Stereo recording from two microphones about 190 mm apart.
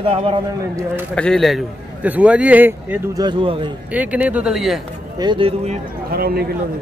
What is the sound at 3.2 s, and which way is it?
Speech, 25° right (ahead or behind).